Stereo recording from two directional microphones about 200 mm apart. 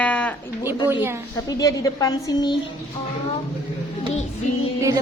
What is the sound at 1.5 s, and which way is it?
A woman's voice, 20° left (ahead or behind).